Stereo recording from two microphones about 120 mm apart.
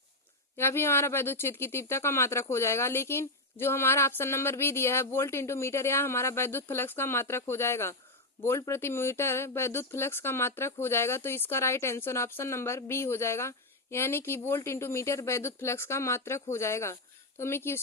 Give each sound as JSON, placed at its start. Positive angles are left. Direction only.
{"t": 0.5, "sound": "speech", "side_deg": 20}